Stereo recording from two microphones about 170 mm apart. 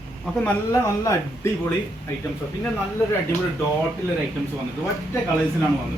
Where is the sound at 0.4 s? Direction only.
15° left (ahead or behind).